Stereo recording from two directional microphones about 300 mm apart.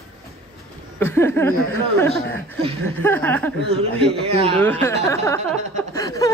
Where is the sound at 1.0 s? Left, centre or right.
Centre.